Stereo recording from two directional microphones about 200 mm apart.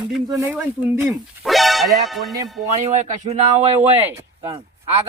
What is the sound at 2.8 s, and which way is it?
Speech, 35° right (ahead or behind).